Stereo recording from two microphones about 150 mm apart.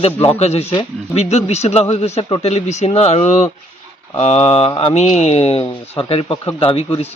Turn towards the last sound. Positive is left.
turn(degrees=35)  # may be behind; listen again after turning